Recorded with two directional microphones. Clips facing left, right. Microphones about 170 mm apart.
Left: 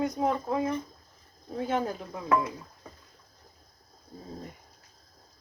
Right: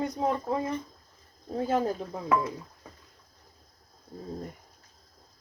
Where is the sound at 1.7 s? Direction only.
35° right (ahead or behind).